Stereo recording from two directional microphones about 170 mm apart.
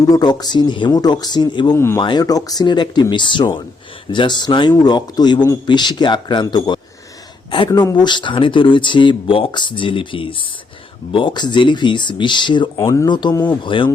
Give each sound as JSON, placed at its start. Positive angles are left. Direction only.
{"t": 0.0, "sound": "speech", "side_deg": 20}